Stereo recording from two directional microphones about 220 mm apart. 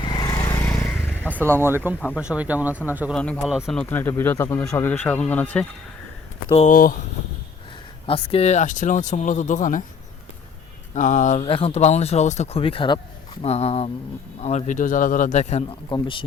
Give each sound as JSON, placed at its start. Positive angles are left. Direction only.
{"t": 0.0, "sound": "vehicle", "side_deg": 20}
{"t": 1.4, "sound": "speech", "side_deg": -10}
{"t": 6.5, "sound": "speech", "side_deg": 35}
{"t": 8.0, "sound": "speech", "side_deg": 25}
{"t": 10.9, "sound": "speech", "side_deg": 35}